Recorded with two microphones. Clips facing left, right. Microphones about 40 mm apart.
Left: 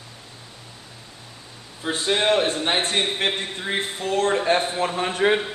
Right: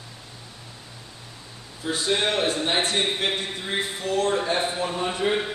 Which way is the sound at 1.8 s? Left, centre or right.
Left.